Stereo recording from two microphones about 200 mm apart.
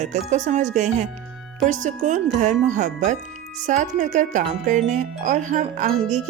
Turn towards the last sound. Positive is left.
turn(degrees=-35)  # may be behind; listen again after turning